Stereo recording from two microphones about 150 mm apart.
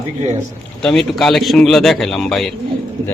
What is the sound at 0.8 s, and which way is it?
A man's voice, centre (ahead or behind).